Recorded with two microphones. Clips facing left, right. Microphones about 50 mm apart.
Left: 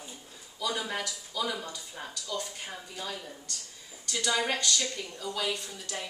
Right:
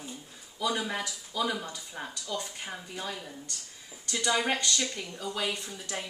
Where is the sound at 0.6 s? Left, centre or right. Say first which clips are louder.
Right 2 dB; right.